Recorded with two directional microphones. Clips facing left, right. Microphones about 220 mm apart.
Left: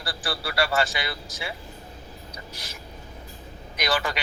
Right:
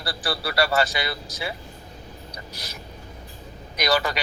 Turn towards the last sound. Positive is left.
turn(degrees=-40)  # may be behind; listen again after turning